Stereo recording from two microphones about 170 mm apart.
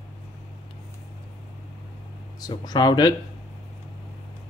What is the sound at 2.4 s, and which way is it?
Speech, 25° left (ahead or behind).